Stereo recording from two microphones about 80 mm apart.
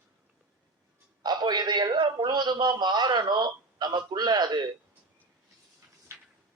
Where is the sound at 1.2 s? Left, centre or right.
Right.